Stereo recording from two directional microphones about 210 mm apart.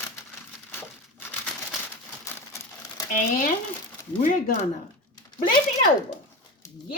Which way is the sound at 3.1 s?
40° left (ahead or behind).